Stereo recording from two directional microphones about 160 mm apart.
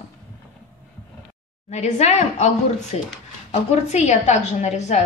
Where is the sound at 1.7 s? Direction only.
45° left (ahead or behind).